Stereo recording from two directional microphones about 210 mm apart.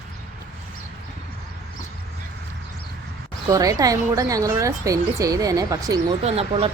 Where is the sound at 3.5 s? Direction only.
15° right (ahead or behind).